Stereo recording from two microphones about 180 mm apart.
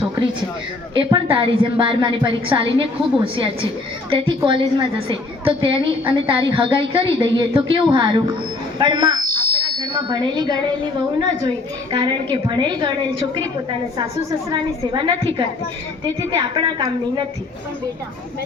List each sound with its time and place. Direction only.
0.9 s a woman's voice: 30° right (ahead or behind)
8.8 s fire alarm: 25° right (ahead or behind)
10.1 s a woman's voice: 25° right (ahead or behind)
14.5 s a woman's voice: 25° right (ahead or behind)